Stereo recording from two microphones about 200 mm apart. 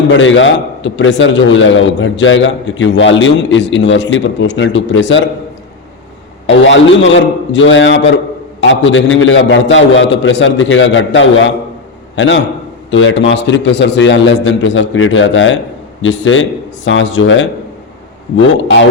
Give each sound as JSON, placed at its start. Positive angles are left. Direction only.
{"t": 0.1, "sound": "a man's voice", "side_deg": 70}
{"t": 6.5, "sound": "a man's voice", "side_deg": 70}